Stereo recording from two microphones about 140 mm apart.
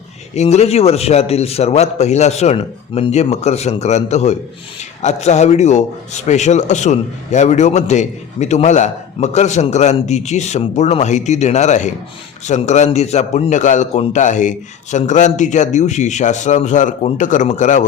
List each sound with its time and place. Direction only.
0.3 s a man's voice: 50° left (ahead or behind)